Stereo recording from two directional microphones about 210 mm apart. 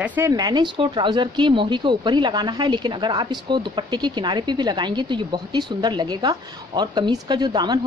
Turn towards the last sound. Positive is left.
turn(degrees=-20)  # may be behind; listen again after turning